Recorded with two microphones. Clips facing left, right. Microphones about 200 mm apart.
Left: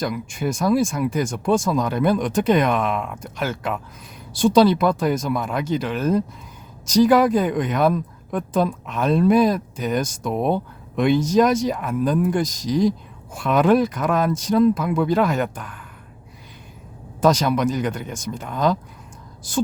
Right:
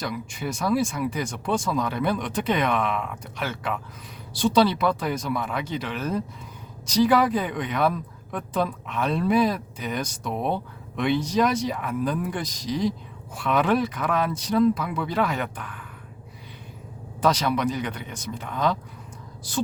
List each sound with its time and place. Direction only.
0.0 s speech: 50° left (ahead or behind)
17.2 s speech: 45° left (ahead or behind)